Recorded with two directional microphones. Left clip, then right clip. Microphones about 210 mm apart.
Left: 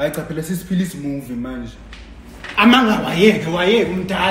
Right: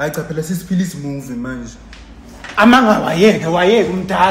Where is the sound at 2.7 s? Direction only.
25° right (ahead or behind).